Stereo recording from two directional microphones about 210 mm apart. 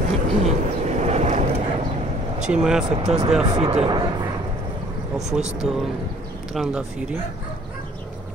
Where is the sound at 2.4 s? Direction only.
5° right (ahead or behind).